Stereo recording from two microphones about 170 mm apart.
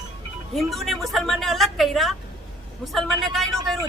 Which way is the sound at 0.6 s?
Centre (ahead or behind).